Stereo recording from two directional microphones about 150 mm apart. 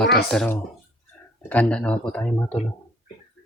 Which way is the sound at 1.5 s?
10° left (ahead or behind).